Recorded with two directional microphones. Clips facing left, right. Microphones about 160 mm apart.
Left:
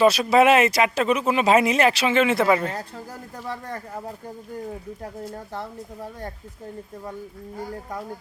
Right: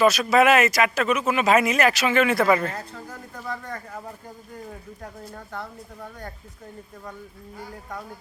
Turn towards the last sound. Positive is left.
turn(degrees=30)  # may be behind; listen again after turning